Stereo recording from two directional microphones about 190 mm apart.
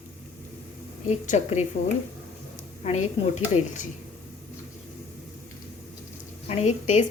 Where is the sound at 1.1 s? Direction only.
35° left (ahead or behind).